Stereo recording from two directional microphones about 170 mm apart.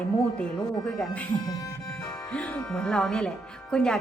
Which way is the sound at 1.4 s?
20° left (ahead or behind).